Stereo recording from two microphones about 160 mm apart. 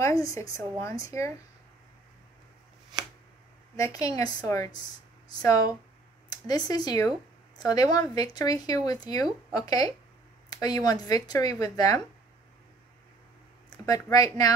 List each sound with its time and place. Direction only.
0.0 s speech: 20° left (ahead or behind)
3.7 s speech: 20° left (ahead or behind)
6.2 s speech: 25° left (ahead or behind)
13.8 s speech: 25° left (ahead or behind)